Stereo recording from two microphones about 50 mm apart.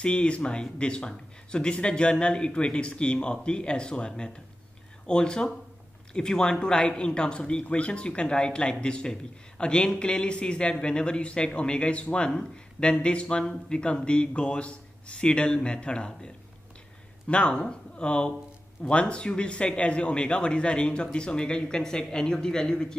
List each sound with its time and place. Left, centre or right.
0.0 s speech: left
17.3 s speech: left